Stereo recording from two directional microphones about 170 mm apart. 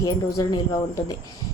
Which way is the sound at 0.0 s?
20° left (ahead or behind).